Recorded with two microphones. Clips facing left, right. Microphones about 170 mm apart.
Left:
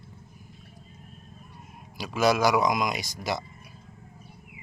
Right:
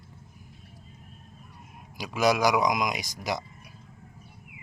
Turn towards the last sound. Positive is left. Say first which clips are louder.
# left 1 dB
turn(degrees=-15)  # may be behind; listen again after turning